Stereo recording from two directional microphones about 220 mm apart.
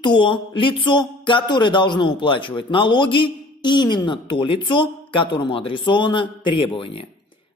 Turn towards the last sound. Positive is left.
turn(degrees=25)  # may be behind; listen again after turning